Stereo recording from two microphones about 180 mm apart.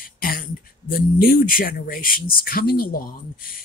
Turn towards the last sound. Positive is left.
turn(degrees=55)  # may be behind; listen again after turning